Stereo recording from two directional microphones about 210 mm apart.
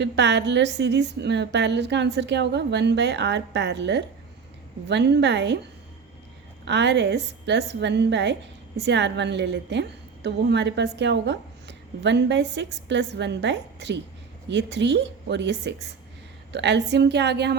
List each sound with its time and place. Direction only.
0.0 s a woman's voice: 55° right (ahead or behind)
6.7 s a woman's voice: 55° right (ahead or behind)